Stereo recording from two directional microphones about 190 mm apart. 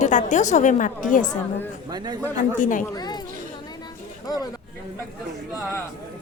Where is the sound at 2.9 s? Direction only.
20° left (ahead or behind).